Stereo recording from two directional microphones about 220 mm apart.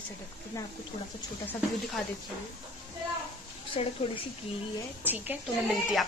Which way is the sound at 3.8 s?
25° left (ahead or behind).